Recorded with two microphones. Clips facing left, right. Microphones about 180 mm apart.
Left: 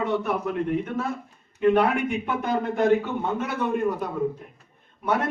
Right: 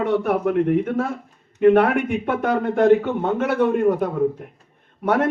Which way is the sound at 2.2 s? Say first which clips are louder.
Right 5 dB; 65° right (ahead or behind).